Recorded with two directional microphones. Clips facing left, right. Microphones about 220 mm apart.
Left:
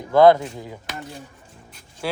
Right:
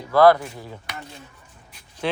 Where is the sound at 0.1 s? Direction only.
20° left (ahead or behind).